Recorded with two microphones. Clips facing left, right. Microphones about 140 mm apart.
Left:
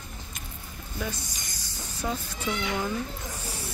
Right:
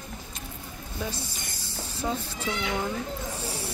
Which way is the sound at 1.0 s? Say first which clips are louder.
Even; 30° right (ahead or behind).